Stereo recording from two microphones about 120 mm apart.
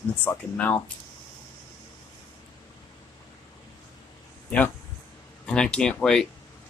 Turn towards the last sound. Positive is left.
turn(degrees=5)  # may be behind; listen again after turning